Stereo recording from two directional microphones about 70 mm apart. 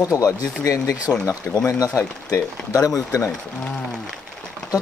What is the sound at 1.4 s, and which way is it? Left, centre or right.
Speech, left.